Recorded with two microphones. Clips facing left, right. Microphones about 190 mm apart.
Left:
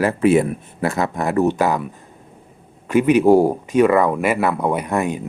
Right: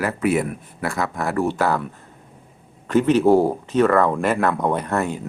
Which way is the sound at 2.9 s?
10° left (ahead or behind).